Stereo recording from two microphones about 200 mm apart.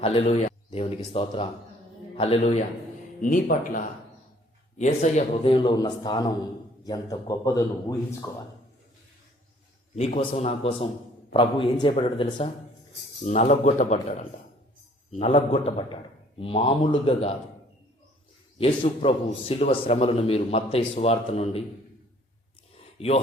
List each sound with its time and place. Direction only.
0.0 s a man's voice: 30° left (ahead or behind)
3.2 s speech: 45° left (ahead or behind)
4.8 s a man's voice: 30° left (ahead or behind); by 8.4 s 15° left (ahead or behind)
9.9 s a man's voice: 30° left (ahead or behind)
18.5 s a man's voice: 25° left (ahead or behind)
23.0 s speech: 30° left (ahead or behind)